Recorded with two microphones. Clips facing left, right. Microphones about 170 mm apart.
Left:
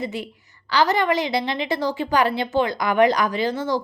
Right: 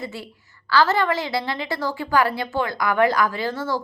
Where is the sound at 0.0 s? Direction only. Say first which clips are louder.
Left 4 dB; 20° left (ahead or behind).